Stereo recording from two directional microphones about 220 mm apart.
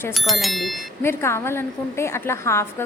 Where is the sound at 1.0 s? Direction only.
10° left (ahead or behind).